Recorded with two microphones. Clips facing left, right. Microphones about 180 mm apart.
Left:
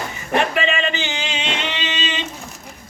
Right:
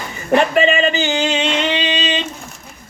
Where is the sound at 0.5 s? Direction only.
40° right (ahead or behind).